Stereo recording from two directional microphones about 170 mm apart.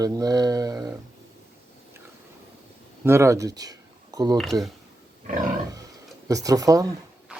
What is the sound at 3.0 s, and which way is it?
Speech, 15° right (ahead or behind).